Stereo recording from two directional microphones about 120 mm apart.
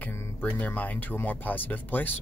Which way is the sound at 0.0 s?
20° left (ahead or behind).